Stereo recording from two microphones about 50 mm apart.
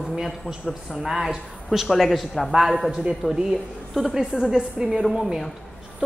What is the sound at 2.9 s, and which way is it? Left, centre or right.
Speech, centre.